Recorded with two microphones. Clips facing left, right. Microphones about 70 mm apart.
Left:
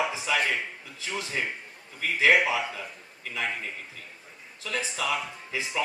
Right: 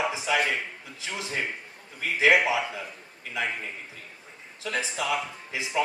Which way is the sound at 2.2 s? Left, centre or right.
Right.